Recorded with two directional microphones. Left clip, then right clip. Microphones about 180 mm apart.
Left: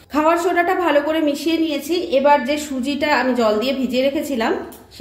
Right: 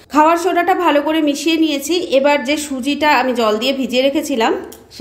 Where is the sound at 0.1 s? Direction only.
35° right (ahead or behind).